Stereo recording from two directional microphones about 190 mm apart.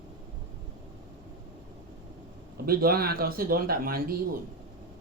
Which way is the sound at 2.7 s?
50° right (ahead or behind).